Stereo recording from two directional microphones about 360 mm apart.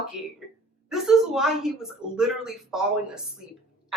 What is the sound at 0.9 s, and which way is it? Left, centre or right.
Speech, centre.